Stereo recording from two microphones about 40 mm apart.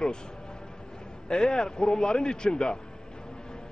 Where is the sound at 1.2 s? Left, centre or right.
Centre.